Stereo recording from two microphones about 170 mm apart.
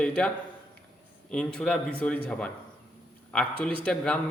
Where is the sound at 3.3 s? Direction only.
Centre (ahead or behind).